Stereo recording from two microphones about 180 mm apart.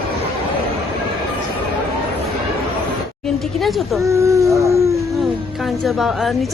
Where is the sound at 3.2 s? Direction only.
Centre (ahead or behind).